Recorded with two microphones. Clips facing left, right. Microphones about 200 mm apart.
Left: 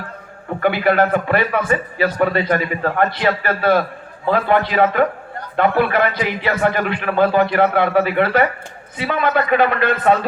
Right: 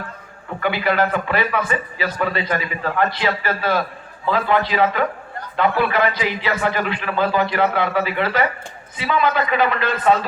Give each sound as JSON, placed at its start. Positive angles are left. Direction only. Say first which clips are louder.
{"t": 0.6, "sound": "a man's voice", "louder": "left 4 dB", "side_deg": 50}